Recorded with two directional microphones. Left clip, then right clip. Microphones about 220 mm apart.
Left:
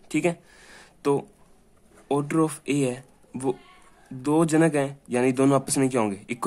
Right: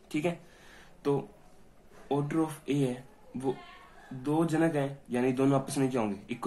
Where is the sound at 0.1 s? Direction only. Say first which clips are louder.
Left 7 dB; 45° left (ahead or behind).